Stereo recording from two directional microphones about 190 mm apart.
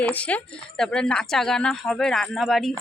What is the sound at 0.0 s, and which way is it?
Speech, 10° left (ahead or behind).